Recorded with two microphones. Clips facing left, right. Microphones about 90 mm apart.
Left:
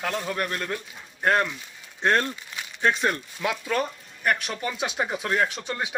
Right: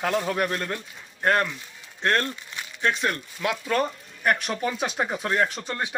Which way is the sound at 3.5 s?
Centre (ahead or behind).